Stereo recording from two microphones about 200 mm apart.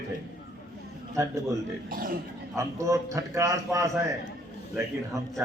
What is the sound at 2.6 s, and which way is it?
A man's voice, 15° right (ahead or behind).